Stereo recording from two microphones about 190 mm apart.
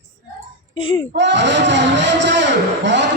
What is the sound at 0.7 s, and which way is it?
Speech, 25° left (ahead or behind).